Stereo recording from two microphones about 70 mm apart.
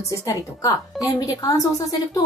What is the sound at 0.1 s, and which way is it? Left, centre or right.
A woman's voice, left.